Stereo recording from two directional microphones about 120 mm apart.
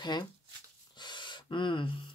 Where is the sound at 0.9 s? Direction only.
40° left (ahead or behind).